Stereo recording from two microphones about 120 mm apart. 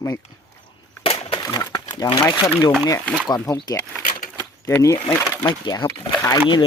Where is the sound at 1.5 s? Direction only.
35° left (ahead or behind).